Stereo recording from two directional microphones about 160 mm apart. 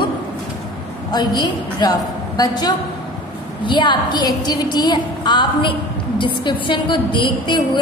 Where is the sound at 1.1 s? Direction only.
25° left (ahead or behind).